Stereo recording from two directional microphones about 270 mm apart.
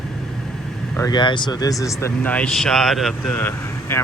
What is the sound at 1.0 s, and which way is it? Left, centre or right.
Speech, centre.